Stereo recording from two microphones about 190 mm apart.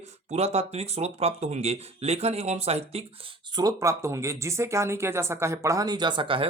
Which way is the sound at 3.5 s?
20° right (ahead or behind).